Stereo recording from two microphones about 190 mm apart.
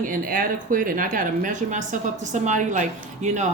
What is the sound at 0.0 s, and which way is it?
A woman's voice, 45° right (ahead or behind).